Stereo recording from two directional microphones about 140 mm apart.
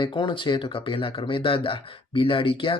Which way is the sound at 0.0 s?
35° left (ahead or behind).